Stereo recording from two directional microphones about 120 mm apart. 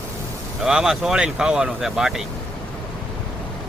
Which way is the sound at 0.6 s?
5° right (ahead or behind).